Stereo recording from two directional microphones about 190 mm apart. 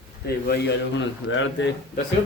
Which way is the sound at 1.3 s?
80° left.